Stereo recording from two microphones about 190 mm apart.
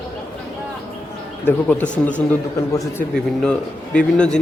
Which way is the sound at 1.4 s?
10° left (ahead or behind).